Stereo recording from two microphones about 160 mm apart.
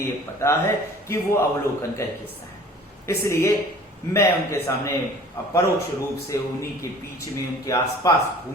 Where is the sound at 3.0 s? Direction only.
15° left (ahead or behind).